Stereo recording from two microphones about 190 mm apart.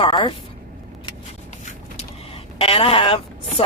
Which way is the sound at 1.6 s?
40° left (ahead or behind).